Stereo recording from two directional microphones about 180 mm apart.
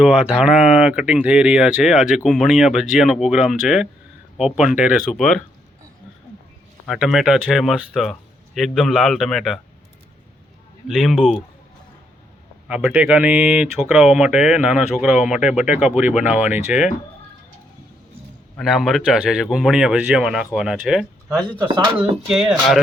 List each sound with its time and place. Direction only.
0.0 s speech: centre (ahead or behind)
6.8 s speech: centre (ahead or behind)
10.8 s speech: centre (ahead or behind)
12.6 s speech: 5° right (ahead or behind)
18.5 s speech: centre (ahead or behind)
21.3 s speech: 25° right (ahead or behind)
22.3 s speech: centre (ahead or behind)